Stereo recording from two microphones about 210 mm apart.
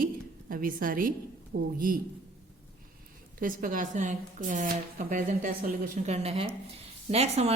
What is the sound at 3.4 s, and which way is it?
Speech, 40° right (ahead or behind).